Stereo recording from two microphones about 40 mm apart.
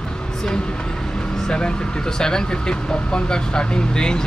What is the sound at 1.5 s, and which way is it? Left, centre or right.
Speech, left.